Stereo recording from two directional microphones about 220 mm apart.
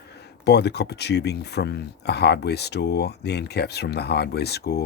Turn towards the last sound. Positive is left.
turn(degrees=45)  # may be behind; listen again after turning